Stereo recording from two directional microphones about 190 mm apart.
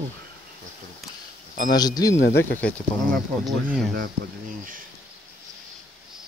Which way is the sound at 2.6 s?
5° left (ahead or behind).